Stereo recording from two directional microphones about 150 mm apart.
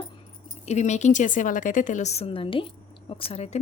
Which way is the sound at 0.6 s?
50° left (ahead or behind).